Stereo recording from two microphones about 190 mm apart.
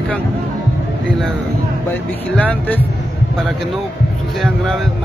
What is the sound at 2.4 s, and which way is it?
Speech, 10° left (ahead or behind).